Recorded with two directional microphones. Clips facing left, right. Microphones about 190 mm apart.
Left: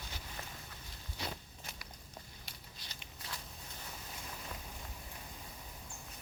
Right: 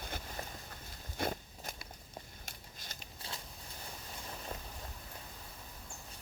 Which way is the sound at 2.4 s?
45° right (ahead or behind).